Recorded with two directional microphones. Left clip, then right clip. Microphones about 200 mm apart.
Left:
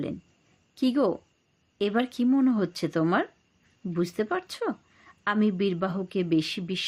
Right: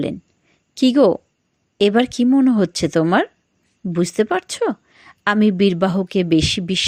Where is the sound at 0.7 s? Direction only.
35° right (ahead or behind).